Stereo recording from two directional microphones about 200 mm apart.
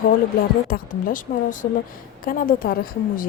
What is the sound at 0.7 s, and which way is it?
A woman's voice, 45° left (ahead or behind).